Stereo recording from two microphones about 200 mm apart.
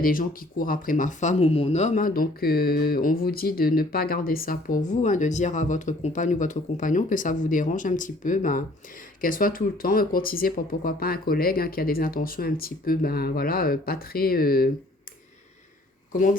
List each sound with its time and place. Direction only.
0.0 s speech: 45° left (ahead or behind)